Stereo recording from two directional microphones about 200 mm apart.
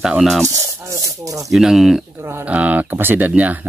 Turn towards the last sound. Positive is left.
turn(degrees=-10)  # may be behind; listen again after turning